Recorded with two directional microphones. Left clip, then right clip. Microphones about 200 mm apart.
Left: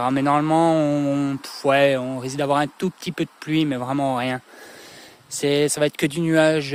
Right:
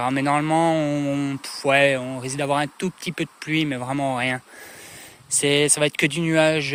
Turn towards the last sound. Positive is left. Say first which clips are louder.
# left 1 dB
turn(degrees=30)  # may be behind; listen again after turning